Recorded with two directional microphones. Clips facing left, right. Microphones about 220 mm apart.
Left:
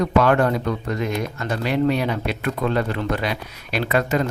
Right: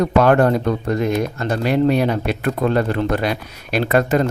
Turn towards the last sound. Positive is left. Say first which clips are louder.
# right 4 dB
turn(degrees=-45)  # may be behind; listen again after turning